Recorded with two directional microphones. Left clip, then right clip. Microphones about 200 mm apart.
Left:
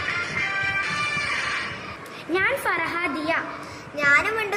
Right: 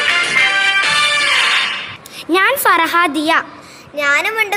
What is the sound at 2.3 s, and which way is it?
A woman's voice, 50° right (ahead or behind).